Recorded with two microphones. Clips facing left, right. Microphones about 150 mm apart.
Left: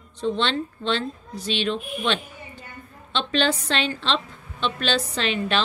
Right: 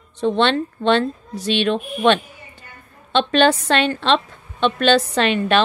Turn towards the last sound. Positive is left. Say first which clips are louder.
# right 7 dB
turn(degrees=-60)  # may be behind; listen again after turning